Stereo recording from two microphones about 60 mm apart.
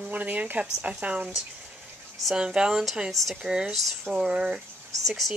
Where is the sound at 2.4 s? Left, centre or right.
Centre.